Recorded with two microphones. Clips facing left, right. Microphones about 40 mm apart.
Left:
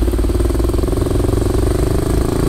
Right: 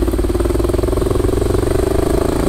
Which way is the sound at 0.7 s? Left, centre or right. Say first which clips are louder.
Right 2 dB; centre.